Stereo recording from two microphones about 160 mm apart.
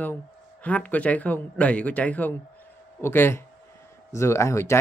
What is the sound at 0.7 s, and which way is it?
Speech, 10° left (ahead or behind).